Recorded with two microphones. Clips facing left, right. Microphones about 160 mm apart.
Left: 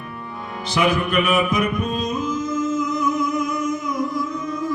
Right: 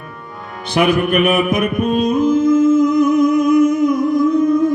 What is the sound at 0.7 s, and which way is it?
Music, 55° right (ahead or behind).